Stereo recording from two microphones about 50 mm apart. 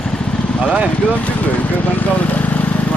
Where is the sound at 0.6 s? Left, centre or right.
Right.